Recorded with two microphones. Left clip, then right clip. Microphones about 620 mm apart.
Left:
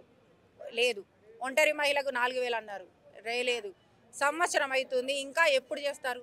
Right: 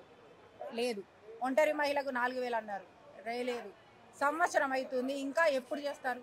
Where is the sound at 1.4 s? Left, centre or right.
Left.